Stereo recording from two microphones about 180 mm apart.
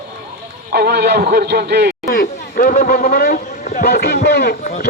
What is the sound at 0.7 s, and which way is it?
A man's voice, 60° right (ahead or behind).